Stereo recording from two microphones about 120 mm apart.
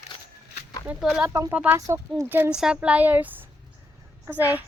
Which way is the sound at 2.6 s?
5° right (ahead or behind).